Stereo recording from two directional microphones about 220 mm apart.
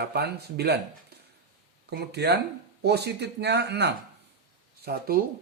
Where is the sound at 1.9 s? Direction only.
50° right (ahead or behind).